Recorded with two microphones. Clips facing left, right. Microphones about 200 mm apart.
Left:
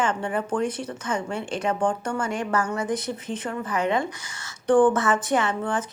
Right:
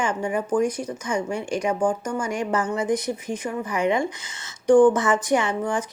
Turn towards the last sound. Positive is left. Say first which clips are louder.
# right 1 dB
turn(degrees=-15)  # may be behind; listen again after turning